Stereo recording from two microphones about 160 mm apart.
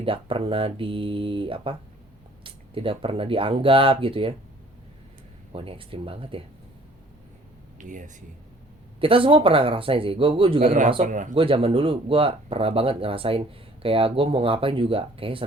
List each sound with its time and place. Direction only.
0.0 s speech: 35° right (ahead or behind)
5.5 s speech: 35° right (ahead or behind)
7.8 s speech: 50° right (ahead or behind)
9.0 s speech: 35° right (ahead or behind)
11.1 s speech: 50° right (ahead or behind)
11.3 s speech: 35° right (ahead or behind)